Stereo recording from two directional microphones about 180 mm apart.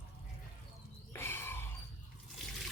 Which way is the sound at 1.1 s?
10° left (ahead or behind).